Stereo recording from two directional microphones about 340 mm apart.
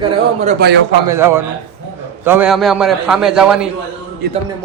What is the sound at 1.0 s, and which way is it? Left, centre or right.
A man's voice, centre.